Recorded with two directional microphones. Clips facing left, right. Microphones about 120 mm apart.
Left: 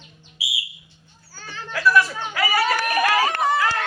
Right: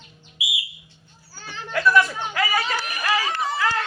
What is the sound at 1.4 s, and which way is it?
Speech, 20° right (ahead or behind).